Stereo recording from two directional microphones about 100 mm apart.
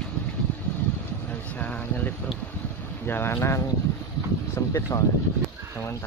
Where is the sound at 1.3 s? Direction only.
15° left (ahead or behind).